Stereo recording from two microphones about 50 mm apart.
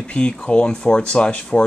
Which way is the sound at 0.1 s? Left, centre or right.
Left.